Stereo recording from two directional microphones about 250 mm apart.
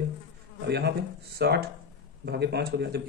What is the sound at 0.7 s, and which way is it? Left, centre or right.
Speech, right.